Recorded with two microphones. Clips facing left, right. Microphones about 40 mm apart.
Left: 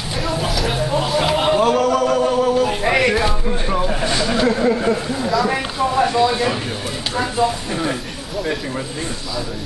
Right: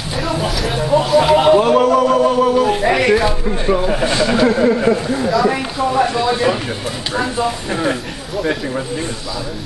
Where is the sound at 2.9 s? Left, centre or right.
Centre.